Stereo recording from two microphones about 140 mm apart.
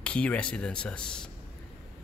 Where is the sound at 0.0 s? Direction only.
10° left (ahead or behind).